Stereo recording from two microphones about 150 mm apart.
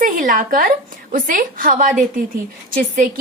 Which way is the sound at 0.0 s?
65° right (ahead or behind).